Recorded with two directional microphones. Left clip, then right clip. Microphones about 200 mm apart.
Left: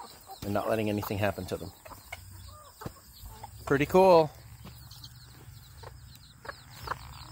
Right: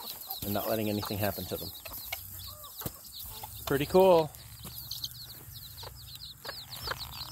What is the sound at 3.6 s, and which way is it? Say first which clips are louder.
Speech: left 2 dB; 15° left (ahead or behind).